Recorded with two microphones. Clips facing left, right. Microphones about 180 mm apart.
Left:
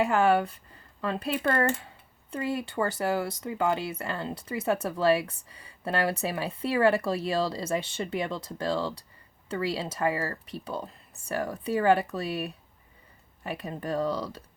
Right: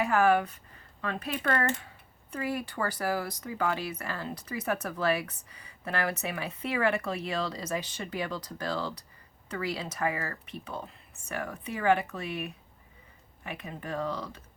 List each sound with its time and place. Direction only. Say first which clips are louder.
0.1 s speech: left 1 dB; 30° left (ahead or behind)